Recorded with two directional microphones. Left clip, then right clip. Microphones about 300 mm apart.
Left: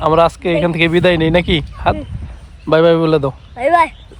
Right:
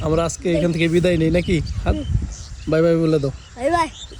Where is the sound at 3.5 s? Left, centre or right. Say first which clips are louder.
Left 7 dB; centre.